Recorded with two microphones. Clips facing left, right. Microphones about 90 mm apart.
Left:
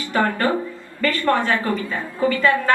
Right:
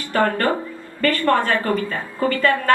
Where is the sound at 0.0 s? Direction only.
50° right (ahead or behind).